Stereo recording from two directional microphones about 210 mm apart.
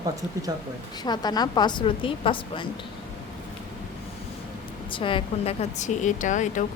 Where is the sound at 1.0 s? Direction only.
20° left (ahead or behind).